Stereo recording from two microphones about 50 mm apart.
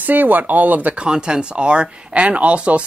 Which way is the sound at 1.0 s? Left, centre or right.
Centre.